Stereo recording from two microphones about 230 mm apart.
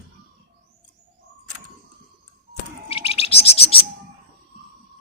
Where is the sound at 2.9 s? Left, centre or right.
Left.